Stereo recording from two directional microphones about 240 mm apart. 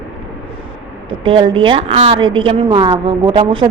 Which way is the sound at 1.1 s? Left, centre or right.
Right.